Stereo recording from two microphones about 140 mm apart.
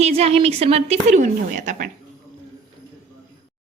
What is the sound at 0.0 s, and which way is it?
A woman's voice, 45° right (ahead or behind).